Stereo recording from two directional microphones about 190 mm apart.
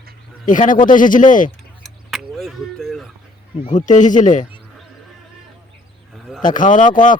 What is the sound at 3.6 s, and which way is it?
Speech, 40° left (ahead or behind).